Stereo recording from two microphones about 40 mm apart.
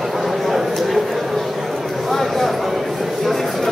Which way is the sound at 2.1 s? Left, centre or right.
Centre.